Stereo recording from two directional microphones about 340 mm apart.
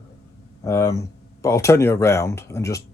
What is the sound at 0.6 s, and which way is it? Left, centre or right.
Speech, centre.